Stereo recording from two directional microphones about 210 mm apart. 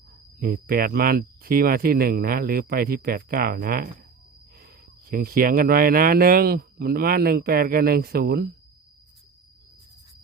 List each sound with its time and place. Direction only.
0.3 s speech: 45° right (ahead or behind)